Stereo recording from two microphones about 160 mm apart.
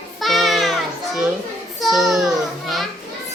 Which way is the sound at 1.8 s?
Centre (ahead or behind).